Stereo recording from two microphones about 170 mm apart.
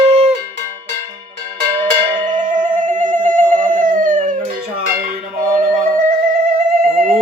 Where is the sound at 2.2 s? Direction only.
50° right (ahead or behind).